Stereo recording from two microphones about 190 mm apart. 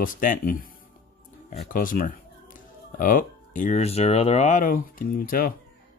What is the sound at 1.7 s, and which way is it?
Speech, 45° left (ahead or behind).